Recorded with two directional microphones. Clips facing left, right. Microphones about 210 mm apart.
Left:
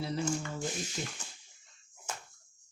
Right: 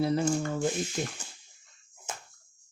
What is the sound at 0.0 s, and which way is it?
Speech, 55° right (ahead or behind).